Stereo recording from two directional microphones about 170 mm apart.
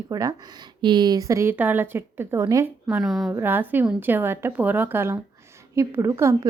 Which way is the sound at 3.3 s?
10° right (ahead or behind).